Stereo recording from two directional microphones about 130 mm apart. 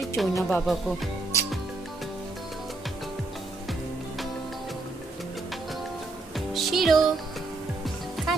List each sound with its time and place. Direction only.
0.2 s music: centre (ahead or behind)
1.3 s music: 20° left (ahead or behind)
6.3 s music: centre (ahead or behind)